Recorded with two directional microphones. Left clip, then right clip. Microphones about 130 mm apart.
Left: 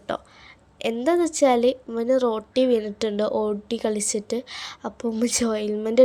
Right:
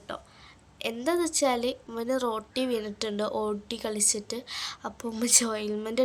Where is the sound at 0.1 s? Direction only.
55° left (ahead or behind).